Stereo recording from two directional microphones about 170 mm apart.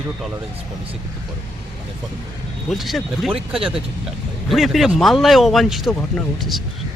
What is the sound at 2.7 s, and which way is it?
Speech, centre (ahead or behind).